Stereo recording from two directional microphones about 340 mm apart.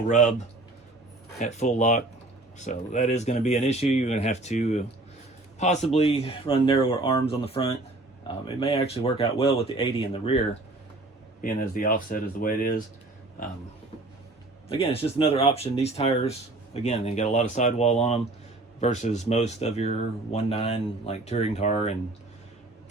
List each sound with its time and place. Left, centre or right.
0.1 s speech: left
1.4 s speech: left
11.4 s speech: left
14.7 s speech: centre